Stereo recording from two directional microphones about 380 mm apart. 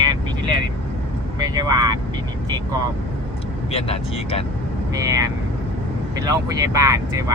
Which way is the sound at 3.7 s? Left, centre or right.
Centre.